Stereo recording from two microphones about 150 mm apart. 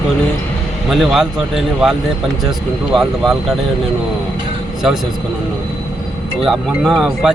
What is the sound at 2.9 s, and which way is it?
Speech, centre (ahead or behind).